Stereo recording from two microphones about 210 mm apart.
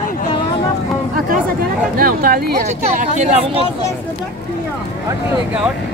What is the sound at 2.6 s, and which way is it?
Speech, 30° right (ahead or behind).